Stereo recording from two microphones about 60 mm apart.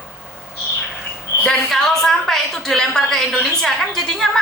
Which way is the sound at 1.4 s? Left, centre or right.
Centre.